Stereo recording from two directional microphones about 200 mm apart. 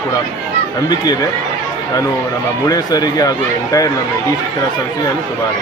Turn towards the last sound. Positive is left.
turn(degrees=20)  # may be behind; listen again after turning